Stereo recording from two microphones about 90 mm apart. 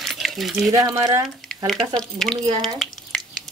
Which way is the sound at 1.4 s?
5° left (ahead or behind).